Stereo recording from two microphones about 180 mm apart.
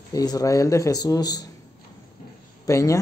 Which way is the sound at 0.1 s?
20° left (ahead or behind).